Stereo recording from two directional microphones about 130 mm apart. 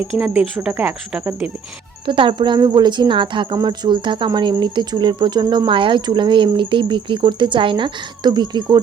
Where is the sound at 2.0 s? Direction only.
40° right (ahead or behind).